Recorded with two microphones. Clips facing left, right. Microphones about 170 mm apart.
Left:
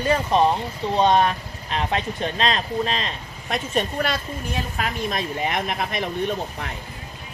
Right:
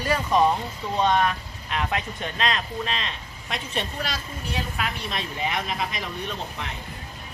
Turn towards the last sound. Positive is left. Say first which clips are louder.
# left 7 dB
turn(degrees=55)  # may be behind; listen again after turning